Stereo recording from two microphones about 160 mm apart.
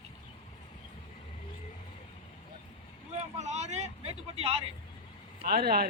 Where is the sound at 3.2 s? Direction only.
45° right (ahead or behind).